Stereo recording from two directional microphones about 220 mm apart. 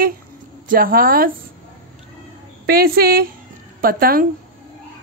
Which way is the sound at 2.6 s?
45° right (ahead or behind).